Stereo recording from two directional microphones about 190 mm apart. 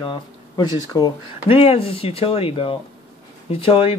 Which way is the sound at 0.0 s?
25° left (ahead or behind).